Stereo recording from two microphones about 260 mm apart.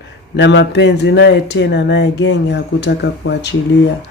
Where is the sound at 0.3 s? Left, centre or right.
Left.